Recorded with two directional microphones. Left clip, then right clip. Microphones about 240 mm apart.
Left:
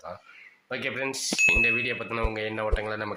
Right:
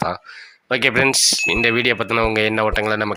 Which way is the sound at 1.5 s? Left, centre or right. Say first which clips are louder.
Right 7 dB; right.